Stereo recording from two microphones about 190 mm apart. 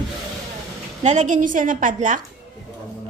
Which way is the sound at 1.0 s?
40° right (ahead or behind).